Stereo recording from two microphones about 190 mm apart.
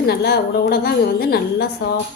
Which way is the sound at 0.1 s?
60° left (ahead or behind).